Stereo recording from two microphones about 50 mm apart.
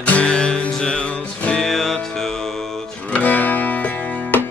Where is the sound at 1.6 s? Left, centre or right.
Centre.